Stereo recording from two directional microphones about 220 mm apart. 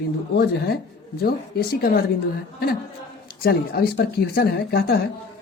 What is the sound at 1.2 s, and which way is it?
Speech, 45° left (ahead or behind).